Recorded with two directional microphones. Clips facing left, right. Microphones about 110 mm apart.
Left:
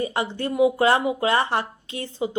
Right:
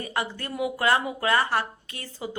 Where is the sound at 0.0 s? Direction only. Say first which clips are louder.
Left 5 dB; 25° left (ahead or behind).